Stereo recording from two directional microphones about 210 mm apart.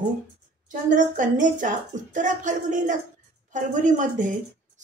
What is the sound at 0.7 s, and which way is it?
Speech, 40° right (ahead or behind).